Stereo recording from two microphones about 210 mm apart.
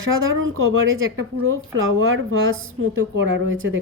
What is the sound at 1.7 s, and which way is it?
A woman's voice, 65° right (ahead or behind).